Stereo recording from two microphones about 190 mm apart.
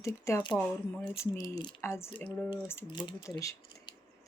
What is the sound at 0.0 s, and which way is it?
Speech, 15° left (ahead or behind).